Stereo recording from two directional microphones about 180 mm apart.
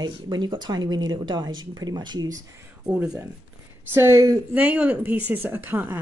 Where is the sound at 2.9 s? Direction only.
5° right (ahead or behind).